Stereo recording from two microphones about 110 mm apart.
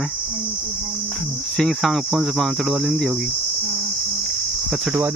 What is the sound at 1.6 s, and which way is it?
Speech, 5° left (ahead or behind).